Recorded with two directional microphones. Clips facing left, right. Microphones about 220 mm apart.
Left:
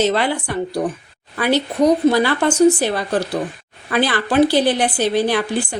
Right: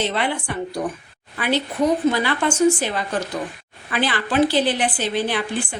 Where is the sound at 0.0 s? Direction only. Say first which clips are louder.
Left 5 dB; 40° left (ahead or behind).